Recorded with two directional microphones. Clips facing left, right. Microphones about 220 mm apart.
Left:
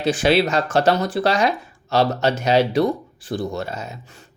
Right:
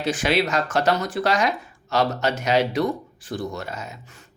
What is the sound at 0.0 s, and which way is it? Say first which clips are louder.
Speech: left 4 dB; 30° left (ahead or behind).